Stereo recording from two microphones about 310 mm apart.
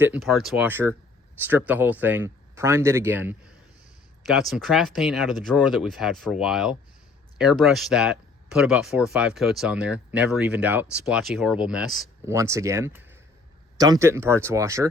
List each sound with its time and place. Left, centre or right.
0.0 s speech: centre